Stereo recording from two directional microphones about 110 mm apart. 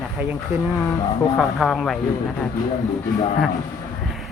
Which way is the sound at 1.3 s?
Centre (ahead or behind).